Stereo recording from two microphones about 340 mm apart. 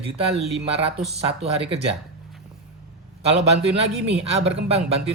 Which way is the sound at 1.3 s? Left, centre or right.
Centre.